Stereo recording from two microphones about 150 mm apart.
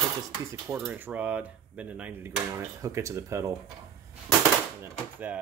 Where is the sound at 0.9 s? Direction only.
10° right (ahead or behind).